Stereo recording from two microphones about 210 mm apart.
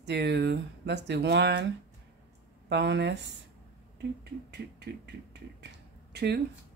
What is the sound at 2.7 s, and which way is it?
Speech, 55° right (ahead or behind).